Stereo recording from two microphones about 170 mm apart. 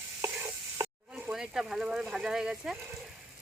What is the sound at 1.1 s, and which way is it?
Speech, 5° right (ahead or behind).